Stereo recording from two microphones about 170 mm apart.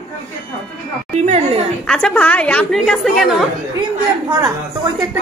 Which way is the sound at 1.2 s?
40° right (ahead or behind).